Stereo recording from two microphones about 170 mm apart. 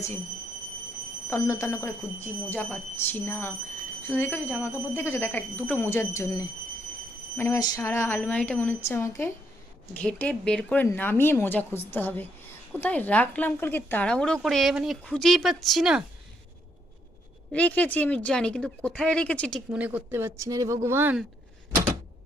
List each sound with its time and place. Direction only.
1.3 s a woman's voice: 15° left (ahead or behind); by 16.0 s 5° right (ahead or behind)
17.5 s speech: 10° left (ahead or behind)
19.8 s speech: 10° right (ahead or behind)